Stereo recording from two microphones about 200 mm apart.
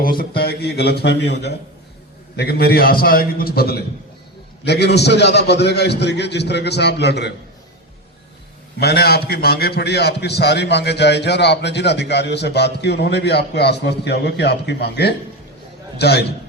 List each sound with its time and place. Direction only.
0.0 s a man's voice: 45° left (ahead or behind)
8.8 s a man's voice: 50° left (ahead or behind)